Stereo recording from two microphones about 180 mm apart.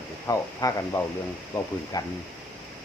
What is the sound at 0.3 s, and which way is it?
Speech, 20° left (ahead or behind).